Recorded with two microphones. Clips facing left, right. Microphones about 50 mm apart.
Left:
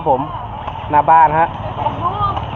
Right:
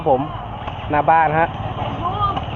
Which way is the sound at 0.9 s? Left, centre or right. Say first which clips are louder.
Left 5 dB; right.